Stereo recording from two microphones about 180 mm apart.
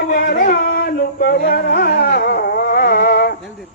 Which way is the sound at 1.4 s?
60° left (ahead or behind).